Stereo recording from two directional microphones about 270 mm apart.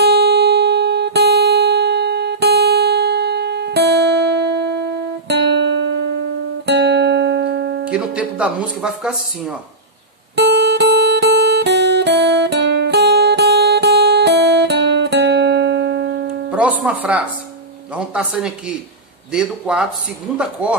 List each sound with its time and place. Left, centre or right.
0.0 s guitar: right
7.9 s speech: centre
10.3 s guitar: right
16.4 s speech: centre